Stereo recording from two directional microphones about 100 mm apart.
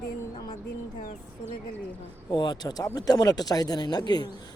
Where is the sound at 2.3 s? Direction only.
45° left (ahead or behind).